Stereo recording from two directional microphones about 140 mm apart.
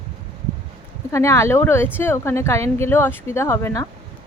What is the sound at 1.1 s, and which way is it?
Speech, 20° left (ahead or behind).